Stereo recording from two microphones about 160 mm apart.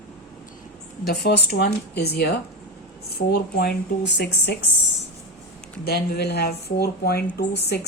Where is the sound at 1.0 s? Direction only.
80° left.